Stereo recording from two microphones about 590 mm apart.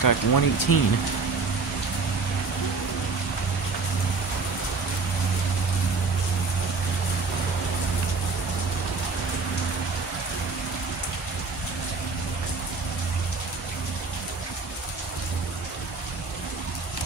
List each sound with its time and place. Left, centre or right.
0.0 s speech: left